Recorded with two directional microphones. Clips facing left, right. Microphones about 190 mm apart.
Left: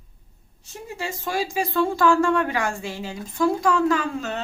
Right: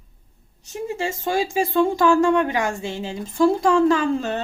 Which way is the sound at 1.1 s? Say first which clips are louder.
Right 1 dB; 25° right (ahead or behind).